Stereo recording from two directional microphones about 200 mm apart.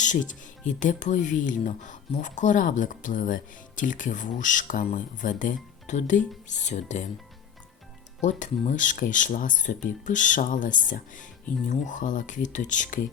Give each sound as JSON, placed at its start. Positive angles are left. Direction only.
{"t": 0.0, "sound": "speech", "side_deg": 40}
{"t": 8.2, "sound": "speech", "side_deg": 40}